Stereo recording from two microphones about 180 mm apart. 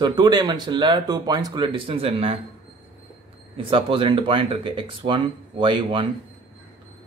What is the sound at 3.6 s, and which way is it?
Speech, 30° right (ahead or behind).